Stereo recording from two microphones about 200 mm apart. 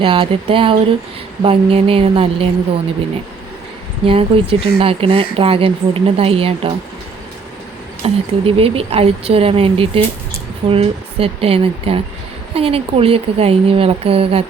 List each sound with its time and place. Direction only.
0.0 s speech: 25° right (ahead or behind)
4.0 s speech: 25° right (ahead or behind)
8.0 s speech: 30° right (ahead or behind)